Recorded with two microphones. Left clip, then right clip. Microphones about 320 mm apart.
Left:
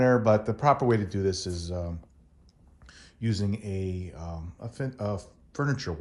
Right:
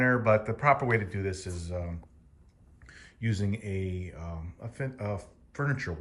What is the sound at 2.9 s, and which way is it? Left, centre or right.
Speech, centre.